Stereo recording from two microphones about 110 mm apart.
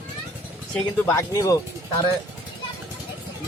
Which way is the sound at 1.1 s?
30° left (ahead or behind).